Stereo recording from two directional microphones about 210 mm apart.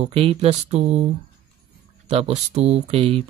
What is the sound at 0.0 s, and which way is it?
Speech, 30° right (ahead or behind).